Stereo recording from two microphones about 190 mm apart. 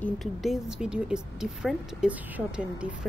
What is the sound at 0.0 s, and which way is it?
A woman's voice, centre (ahead or behind).